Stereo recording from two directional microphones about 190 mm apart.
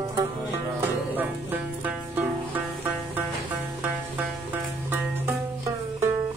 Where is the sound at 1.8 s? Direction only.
10° right (ahead or behind).